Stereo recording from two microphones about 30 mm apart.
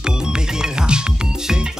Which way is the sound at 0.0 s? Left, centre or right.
Right.